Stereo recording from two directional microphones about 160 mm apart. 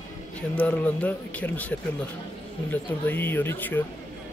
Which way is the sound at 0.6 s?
10° left (ahead or behind).